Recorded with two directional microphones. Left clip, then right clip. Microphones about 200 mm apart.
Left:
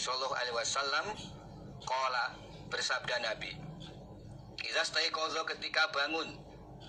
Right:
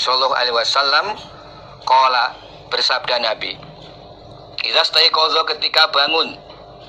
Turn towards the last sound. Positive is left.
turn(degrees=-35)  # may be behind; listen again after turning